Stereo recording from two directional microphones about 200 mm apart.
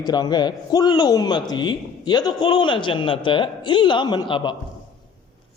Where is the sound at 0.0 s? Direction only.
20° left (ahead or behind).